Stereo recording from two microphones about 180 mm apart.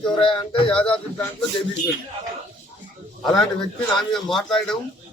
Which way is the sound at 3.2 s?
5° left (ahead or behind).